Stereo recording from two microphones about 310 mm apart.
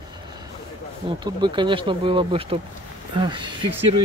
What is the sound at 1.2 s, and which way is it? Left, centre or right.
Speech, centre.